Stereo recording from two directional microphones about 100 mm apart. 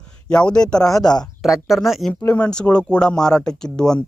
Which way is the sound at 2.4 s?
10° left (ahead or behind).